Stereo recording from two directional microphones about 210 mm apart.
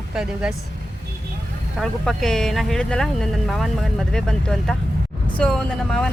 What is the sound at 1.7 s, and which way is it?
Speech, centre (ahead or behind).